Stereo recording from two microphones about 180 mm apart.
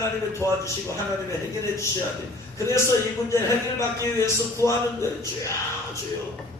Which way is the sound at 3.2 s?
15° left (ahead or behind).